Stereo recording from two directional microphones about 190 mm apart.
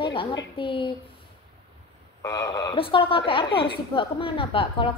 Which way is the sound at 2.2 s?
15° left (ahead or behind).